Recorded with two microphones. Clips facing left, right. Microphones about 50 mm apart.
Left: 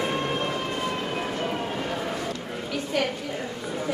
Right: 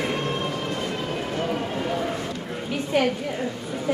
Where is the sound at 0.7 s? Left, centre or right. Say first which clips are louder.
Even; centre.